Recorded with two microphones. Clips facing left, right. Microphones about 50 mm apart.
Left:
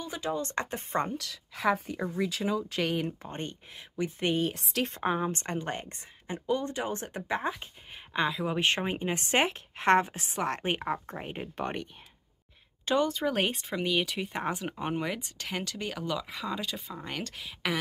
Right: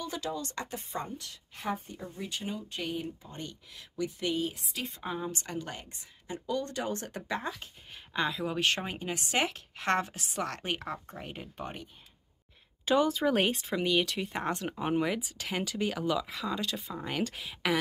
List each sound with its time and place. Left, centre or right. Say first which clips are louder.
0.0 s speech: even; left
0.3 s speech: left 5 dB; left
1.1 s speech: left 6 dB; left
3.3 s speech: left 5 dB; left
4.6 s speech: left 7 dB; left
5.1 s speech: left 5 dB; left
6.3 s speech: left 3 dB; left; by 8.5 s centre
8.5 s speech: left 2 dB; left
11.5 s speech: left 9 dB; left
12.8 s speech: right 1 dB; centre